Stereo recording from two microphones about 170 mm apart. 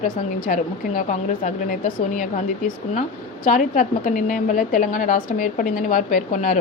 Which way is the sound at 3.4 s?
50° left (ahead or behind).